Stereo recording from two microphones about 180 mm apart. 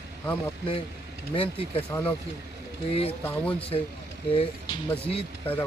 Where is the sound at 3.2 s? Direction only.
10° left (ahead or behind).